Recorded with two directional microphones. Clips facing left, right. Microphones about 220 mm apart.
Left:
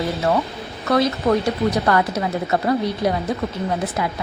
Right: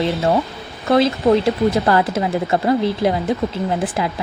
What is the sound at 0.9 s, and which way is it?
Speech, 25° right (ahead or behind).